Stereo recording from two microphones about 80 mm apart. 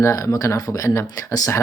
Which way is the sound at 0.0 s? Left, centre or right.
Left.